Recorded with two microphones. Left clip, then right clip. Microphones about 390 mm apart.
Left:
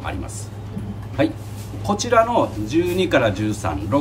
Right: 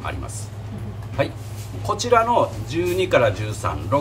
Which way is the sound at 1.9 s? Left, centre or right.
Centre.